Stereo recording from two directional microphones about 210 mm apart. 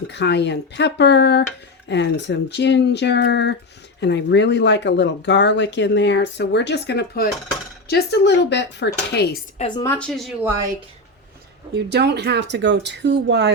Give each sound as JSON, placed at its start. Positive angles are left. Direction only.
{"t": 0.1, "sound": "speech", "side_deg": 55}
{"t": 9.6, "sound": "speech", "side_deg": 20}
{"t": 11.7, "sound": "speech", "side_deg": -55}